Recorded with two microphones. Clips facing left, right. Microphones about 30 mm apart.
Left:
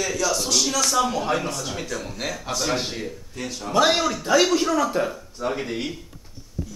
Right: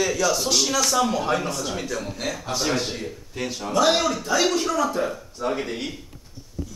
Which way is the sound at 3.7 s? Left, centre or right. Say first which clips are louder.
Left 1 dB; centre.